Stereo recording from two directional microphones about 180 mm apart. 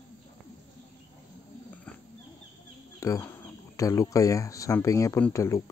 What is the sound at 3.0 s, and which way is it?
Speech, 20° left (ahead or behind).